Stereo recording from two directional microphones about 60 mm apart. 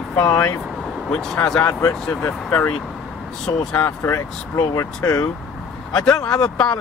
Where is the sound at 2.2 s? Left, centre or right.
Left.